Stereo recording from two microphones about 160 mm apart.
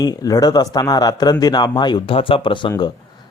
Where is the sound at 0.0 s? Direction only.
25° left (ahead or behind).